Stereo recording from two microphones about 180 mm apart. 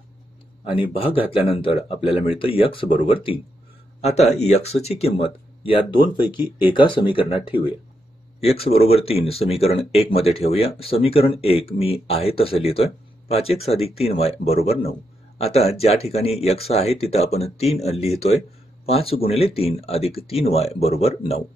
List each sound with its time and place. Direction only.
0.9 s speech: 30° left (ahead or behind)